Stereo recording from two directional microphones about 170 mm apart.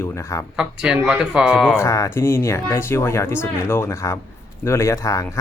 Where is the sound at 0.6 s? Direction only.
5° right (ahead or behind).